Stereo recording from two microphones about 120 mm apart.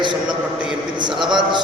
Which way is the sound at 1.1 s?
5° right (ahead or behind).